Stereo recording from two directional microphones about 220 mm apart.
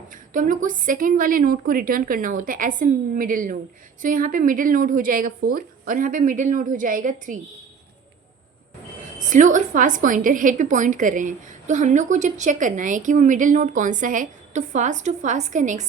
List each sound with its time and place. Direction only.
0.1 s a woman's voice: 35° right (ahead or behind)
9.3 s a woman's voice: 35° right (ahead or behind)